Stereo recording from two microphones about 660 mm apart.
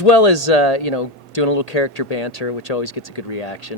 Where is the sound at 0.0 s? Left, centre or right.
Left.